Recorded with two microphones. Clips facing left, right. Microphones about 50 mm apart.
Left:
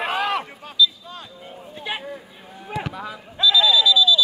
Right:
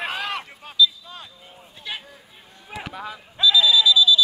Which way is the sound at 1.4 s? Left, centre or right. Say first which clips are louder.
Left 8 dB; centre.